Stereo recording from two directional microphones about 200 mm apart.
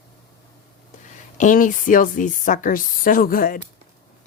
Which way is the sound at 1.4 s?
40° left (ahead or behind).